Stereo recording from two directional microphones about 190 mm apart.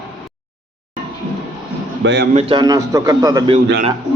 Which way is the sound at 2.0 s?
65° right (ahead or behind).